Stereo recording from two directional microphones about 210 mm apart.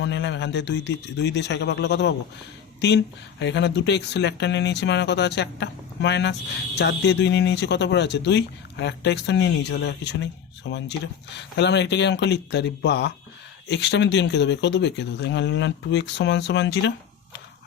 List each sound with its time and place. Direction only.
0.0 s speech: 55° left (ahead or behind)